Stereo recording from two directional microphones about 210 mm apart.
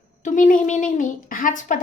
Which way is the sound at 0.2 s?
35° left (ahead or behind).